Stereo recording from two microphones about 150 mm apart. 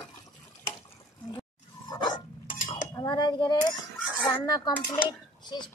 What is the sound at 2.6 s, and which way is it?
Cutlery, 35° left (ahead or behind).